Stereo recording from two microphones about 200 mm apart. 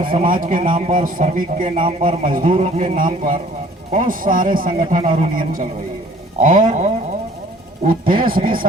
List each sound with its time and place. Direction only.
0.2 s a man's voice: 45° right (ahead or behind)
1.6 s speech: 25° right (ahead or behind)
2.3 s a man's voice: 40° right (ahead or behind)